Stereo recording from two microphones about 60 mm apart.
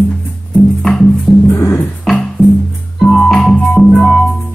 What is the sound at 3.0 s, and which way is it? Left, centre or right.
Music, centre.